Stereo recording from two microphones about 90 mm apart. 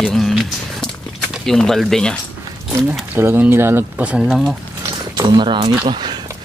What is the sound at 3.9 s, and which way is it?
Speech, 15° right (ahead or behind).